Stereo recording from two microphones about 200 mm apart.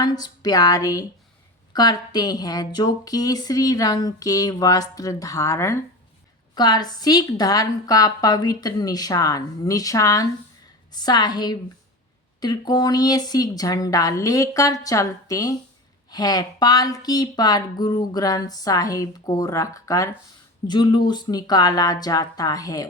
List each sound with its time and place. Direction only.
0.0 s a woman's voice: 20° left (ahead or behind)